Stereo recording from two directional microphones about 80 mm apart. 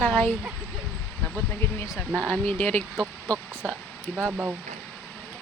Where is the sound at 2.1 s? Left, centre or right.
Centre.